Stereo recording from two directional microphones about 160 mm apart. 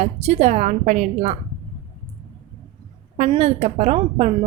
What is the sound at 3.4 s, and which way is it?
Speech, 45° right (ahead or behind).